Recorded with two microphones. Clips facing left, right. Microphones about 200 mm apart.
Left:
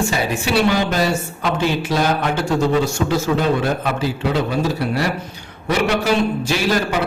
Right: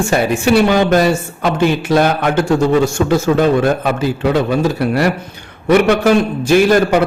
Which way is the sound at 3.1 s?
50° right (ahead or behind).